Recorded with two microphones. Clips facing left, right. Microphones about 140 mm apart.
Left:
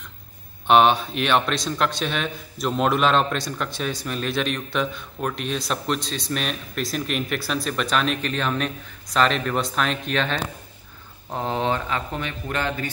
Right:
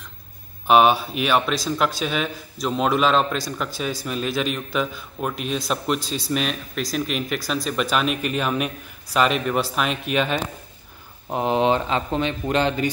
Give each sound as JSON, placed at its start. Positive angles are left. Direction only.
{"t": 0.7, "sound": "speech", "side_deg": -5}